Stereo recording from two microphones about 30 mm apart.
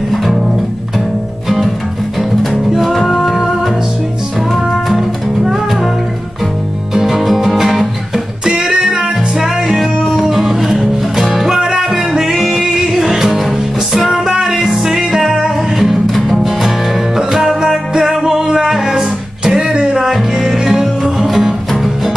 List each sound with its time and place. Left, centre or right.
0.1 s music: centre
2.1 s music: centre
6.9 s music: centre
8.5 s music: right
9.8 s music: centre
10.2 s music: centre
11.4 s music: right
16.1 s music: centre; by 20.1 s right
20.1 s music: centre